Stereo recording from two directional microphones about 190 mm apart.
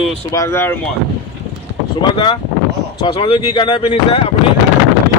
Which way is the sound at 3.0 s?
30° left (ahead or behind).